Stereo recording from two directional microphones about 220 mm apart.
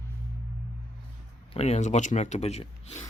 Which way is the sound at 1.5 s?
30° left (ahead or behind).